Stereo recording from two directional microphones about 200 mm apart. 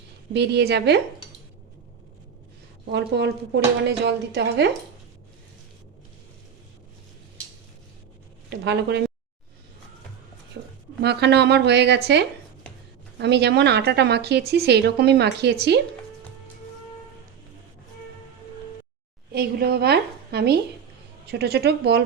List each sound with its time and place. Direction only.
0.3 s a woman's voice: 55° right (ahead or behind)
2.9 s a woman's voice: 60° right (ahead or behind)
8.4 s a woman's voice: 60° right (ahead or behind)
10.5 s a woman's voice: 55° right (ahead or behind)
19.3 s a woman's voice: 50° right (ahead or behind)